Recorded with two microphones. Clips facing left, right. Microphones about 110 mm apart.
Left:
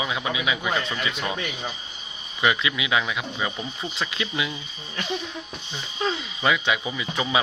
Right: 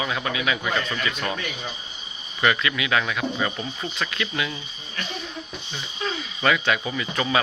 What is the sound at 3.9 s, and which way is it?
Speech, 20° left (ahead or behind).